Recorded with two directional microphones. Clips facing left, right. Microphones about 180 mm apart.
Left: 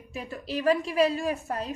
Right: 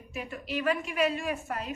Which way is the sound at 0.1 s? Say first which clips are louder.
Left 2 dB; 35° left (ahead or behind).